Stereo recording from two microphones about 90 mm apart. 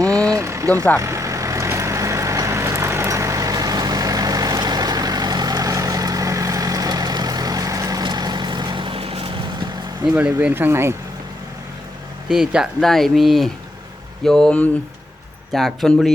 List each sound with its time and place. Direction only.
0.0 s vehicle: 40° right (ahead or behind); by 9.6 s 60° right (ahead or behind)
10.5 s speech: 25° right (ahead or behind)
12.3 s speech: 10° right (ahead or behind)
12.8 s speech: centre (ahead or behind)